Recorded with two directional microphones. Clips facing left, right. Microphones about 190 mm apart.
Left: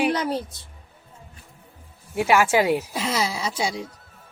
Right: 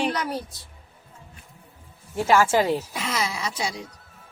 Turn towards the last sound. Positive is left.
turn(degrees=30)  # may be behind; listen again after turning